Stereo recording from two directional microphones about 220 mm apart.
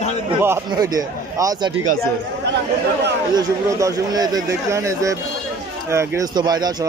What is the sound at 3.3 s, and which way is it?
Speech, 15° right (ahead or behind).